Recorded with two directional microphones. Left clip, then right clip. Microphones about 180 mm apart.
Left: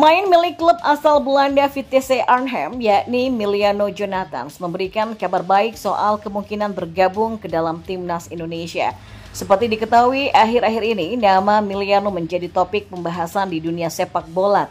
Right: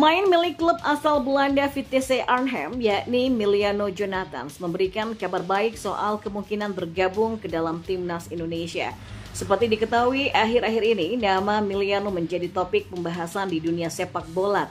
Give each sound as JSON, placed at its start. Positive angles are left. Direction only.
{"t": 0.0, "sound": "a woman's voice", "side_deg": 15}